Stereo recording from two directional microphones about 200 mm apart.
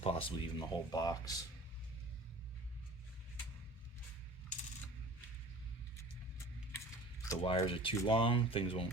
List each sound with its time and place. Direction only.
0.0 s speech: 25° left (ahead or behind)
6.7 s coin: 15° left (ahead or behind)
7.4 s speech: 25° left (ahead or behind)